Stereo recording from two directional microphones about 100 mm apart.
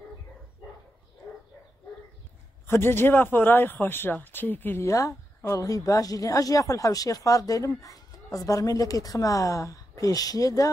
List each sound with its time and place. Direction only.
2.6 s speech: 25° left (ahead or behind)